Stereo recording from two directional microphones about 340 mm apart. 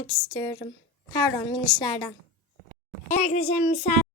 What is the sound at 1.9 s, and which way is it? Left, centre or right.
A woman's voice, centre.